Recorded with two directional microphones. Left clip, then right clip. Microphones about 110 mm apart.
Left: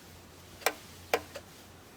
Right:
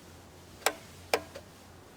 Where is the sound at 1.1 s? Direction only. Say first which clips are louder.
Right 1 dB; 15° right (ahead or behind).